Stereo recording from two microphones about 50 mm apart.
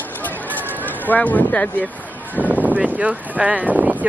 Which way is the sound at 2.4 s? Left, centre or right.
Right.